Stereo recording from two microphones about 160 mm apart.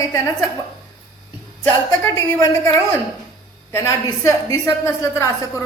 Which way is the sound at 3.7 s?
20° left (ahead or behind).